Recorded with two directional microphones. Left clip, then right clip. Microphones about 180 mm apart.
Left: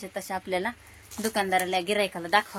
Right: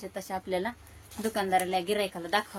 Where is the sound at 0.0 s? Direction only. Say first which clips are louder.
Left 3 dB; 20° left (ahead or behind).